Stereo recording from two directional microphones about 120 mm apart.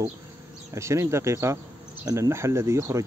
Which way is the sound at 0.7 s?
25° right (ahead or behind).